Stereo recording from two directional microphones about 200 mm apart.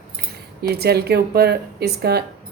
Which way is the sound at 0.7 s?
55° right (ahead or behind).